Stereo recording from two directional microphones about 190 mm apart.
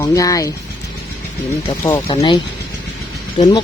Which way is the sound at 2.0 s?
25° left (ahead or behind).